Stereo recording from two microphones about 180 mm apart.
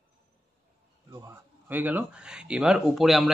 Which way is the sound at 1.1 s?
15° right (ahead or behind).